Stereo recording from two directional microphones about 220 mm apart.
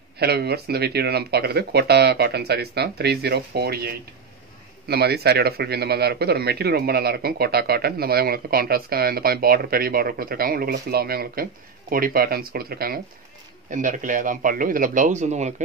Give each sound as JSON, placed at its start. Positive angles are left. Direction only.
{"t": 0.2, "sound": "a man's voice", "side_deg": -45}